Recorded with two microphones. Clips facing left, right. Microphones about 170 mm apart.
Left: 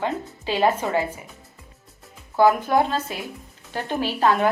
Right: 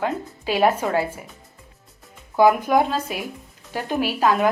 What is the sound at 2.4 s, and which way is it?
A woman's voice, 15° right (ahead or behind).